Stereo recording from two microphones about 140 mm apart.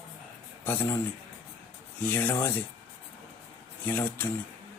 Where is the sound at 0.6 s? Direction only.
15° left (ahead or behind).